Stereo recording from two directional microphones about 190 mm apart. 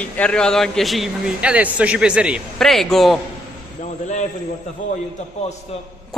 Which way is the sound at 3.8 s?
40° left (ahead or behind).